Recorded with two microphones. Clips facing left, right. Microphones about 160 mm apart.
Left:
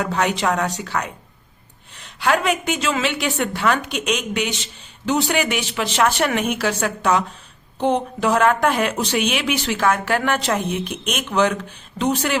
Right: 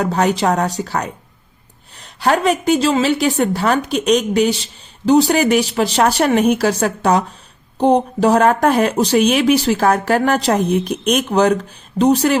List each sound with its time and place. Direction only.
0.0 s a woman's voice: 35° right (ahead or behind)